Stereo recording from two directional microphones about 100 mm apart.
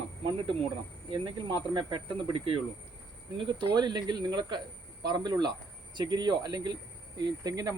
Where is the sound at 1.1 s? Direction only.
55° right (ahead or behind).